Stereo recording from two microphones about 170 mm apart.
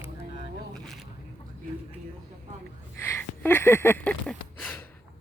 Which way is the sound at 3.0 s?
15° left (ahead or behind).